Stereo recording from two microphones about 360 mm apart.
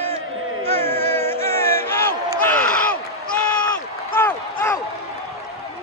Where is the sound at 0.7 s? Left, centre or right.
Centre.